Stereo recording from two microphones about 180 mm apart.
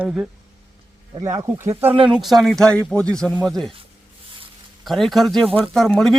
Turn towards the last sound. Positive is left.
turn(degrees=5)  # may be behind; listen again after turning